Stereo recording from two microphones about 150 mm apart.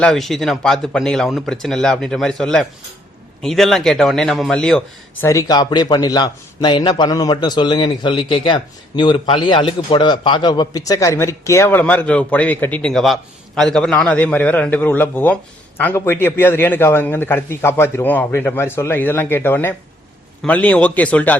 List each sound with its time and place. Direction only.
0.0 s speech: centre (ahead or behind)
5.2 s a man's voice: 20° left (ahead or behind)